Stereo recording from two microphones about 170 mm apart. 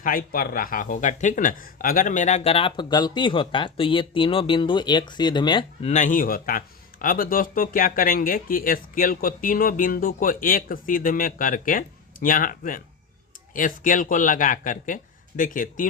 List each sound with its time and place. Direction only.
0.0 s speech: 55° left (ahead or behind); by 5.9 s 30° left (ahead or behind)
5.9 s a man's voice: 50° left (ahead or behind)